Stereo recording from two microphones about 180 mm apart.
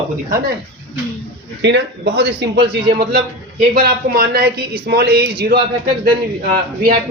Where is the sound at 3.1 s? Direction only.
55° right (ahead or behind).